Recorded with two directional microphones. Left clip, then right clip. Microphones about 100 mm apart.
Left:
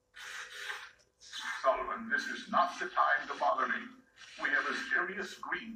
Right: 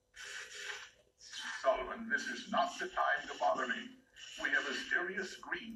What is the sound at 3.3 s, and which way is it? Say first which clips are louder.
Radio: left 3 dB; 25° left (ahead or behind).